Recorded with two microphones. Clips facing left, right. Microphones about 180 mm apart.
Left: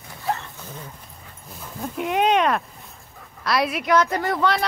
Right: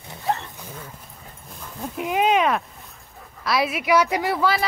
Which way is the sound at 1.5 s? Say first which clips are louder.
Left 1 dB; centre (ahead or behind).